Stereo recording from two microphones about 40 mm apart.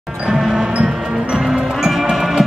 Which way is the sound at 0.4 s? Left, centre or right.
Centre.